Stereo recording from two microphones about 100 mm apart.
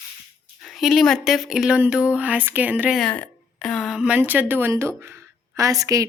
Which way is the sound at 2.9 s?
10° left (ahead or behind).